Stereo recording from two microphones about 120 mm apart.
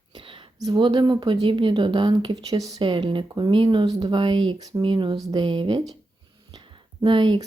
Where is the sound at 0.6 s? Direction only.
40° right (ahead or behind).